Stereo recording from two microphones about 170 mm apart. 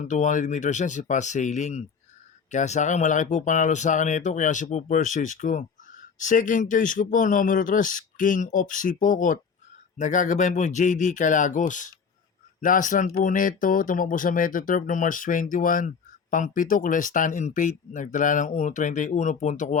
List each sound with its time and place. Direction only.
0.0 s speech: 45° left (ahead or behind)